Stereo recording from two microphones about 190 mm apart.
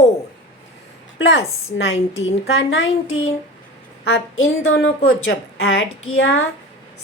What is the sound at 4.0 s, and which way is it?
A woman's voice, 75° left (ahead or behind).